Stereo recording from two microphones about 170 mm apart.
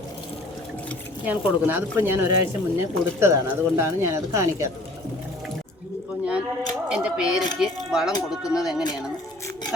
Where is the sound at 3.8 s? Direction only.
15° right (ahead or behind).